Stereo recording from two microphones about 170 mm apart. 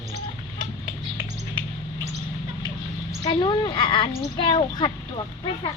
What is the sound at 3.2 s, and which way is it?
Speech, 25° left (ahead or behind).